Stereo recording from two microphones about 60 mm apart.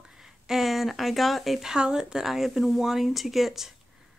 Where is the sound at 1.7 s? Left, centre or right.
Centre.